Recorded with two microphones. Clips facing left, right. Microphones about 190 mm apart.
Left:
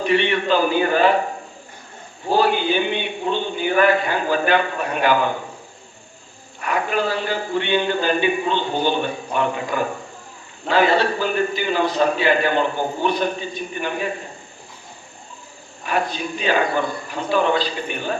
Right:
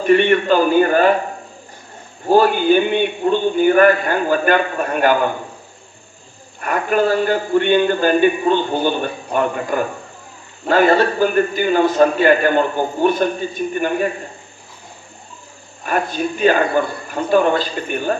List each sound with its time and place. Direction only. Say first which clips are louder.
0.0 s a man's voice: right 6 dB; 50° right (ahead or behind)
2.3 s a man's voice: right 6 dB; 50° right (ahead or behind)
6.6 s a man's voice: right 5 dB; 50° right (ahead or behind)
15.8 s a man's voice: right 3 dB; 50° right (ahead or behind)